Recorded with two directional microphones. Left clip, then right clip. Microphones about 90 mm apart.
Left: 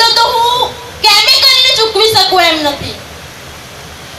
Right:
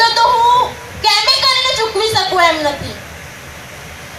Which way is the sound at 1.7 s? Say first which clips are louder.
Left 6 dB; 30° left (ahead or behind).